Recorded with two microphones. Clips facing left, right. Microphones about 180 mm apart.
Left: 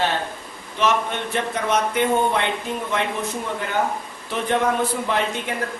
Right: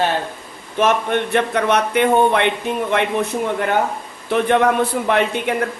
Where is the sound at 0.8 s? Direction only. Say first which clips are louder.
Right 5 dB; 55° right (ahead or behind).